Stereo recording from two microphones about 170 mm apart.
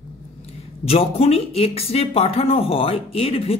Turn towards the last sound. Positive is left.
turn(degrees=35)  # may be behind; listen again after turning